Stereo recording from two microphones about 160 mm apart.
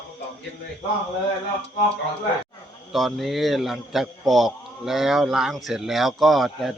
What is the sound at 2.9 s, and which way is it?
A man's voice, centre (ahead or behind).